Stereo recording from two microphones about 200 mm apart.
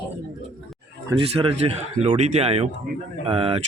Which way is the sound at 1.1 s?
25° right (ahead or behind).